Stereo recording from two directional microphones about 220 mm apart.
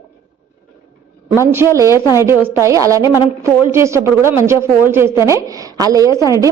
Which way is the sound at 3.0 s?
20° left (ahead or behind).